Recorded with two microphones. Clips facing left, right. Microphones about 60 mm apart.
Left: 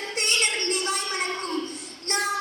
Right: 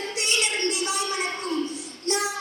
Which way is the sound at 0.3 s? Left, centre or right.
Left.